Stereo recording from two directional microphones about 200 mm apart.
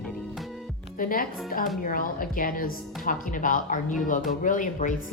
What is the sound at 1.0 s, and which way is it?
A woman's voice, 45° left (ahead or behind).